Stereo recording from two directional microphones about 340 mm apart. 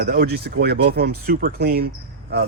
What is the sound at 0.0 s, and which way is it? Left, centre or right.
Speech, right.